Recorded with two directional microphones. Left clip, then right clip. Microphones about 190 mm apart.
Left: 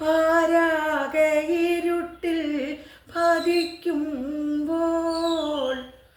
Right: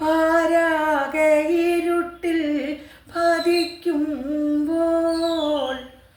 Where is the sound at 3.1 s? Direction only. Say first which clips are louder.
Right 1 dB; 20° left (ahead or behind).